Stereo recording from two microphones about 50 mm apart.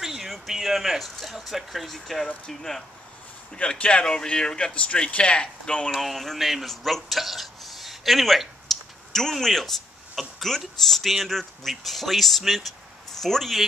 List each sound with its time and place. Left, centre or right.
0.0 s speech: centre
3.5 s speech: left
5.9 s speech: centre